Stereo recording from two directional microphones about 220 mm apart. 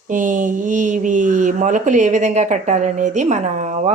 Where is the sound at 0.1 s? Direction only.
35° right (ahead or behind).